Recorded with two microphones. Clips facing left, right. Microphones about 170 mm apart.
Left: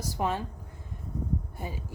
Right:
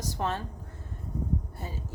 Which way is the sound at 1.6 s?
15° left (ahead or behind).